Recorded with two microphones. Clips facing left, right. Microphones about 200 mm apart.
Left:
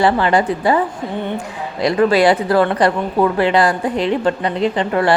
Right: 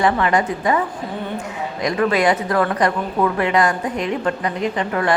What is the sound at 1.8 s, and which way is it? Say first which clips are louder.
Speech: left 5 dB; 30° left (ahead or behind).